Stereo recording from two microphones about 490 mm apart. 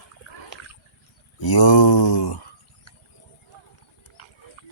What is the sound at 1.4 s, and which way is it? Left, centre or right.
Mantra, left.